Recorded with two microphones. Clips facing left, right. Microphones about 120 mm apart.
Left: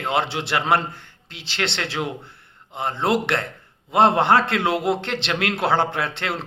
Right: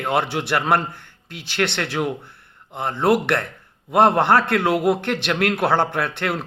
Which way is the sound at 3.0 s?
20° left (ahead or behind).